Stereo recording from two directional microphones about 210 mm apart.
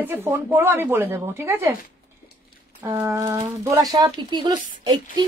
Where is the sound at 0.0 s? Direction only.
10° right (ahead or behind).